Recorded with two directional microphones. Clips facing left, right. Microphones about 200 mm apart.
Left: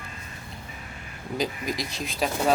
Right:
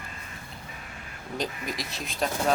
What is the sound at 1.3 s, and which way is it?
Speech, centre (ahead or behind).